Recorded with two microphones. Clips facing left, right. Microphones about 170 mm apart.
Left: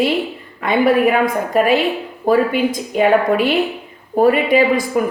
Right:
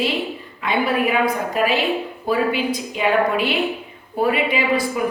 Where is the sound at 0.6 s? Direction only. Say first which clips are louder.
Left 6 dB; 50° left (ahead or behind).